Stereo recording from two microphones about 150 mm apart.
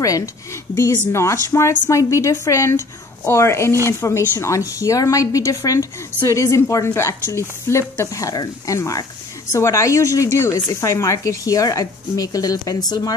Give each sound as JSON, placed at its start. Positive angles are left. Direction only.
{"t": 0.0, "sound": "speech", "side_deg": 20}